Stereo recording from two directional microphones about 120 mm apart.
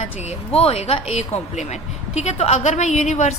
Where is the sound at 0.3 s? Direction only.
55° left (ahead or behind).